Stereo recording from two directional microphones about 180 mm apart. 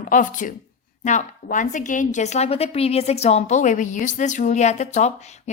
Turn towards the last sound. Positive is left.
turn(degrees=40)  # may be behind; listen again after turning